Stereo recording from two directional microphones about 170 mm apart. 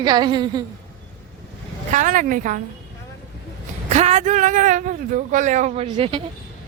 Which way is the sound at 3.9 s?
40° right (ahead or behind).